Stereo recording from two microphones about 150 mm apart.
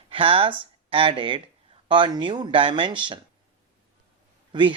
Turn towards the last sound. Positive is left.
turn(degrees=-30)  # may be behind; listen again after turning